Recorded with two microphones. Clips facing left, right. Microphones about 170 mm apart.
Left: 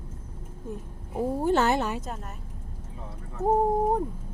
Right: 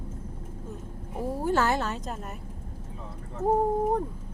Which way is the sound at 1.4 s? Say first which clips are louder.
Left 1 dB; 20° left (ahead or behind).